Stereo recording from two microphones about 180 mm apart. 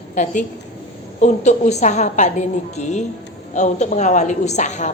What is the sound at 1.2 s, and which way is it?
A woman's voice, 40° left (ahead or behind).